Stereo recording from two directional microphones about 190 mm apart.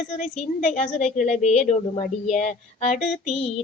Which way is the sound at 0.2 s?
35° left (ahead or behind).